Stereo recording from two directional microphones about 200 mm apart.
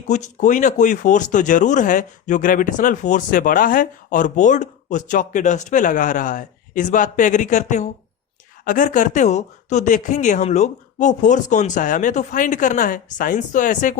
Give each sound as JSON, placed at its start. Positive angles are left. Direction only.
{"t": 0.1, "sound": "speech", "side_deg": 35}